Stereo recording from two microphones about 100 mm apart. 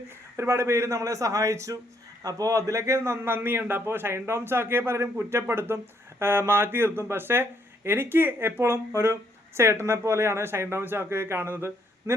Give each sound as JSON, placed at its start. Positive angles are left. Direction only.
{"t": 0.3, "sound": "a man's voice", "side_deg": -25}